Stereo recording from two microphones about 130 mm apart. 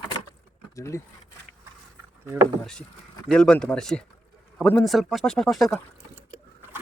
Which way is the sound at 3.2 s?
5° left (ahead or behind).